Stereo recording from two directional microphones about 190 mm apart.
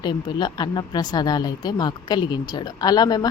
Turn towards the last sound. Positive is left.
turn(degrees=20)  # may be behind; listen again after turning